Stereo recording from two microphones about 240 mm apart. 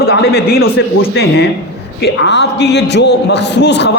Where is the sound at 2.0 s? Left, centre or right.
Left.